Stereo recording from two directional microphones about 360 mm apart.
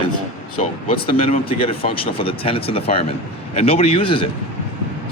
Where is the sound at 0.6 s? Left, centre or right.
Centre.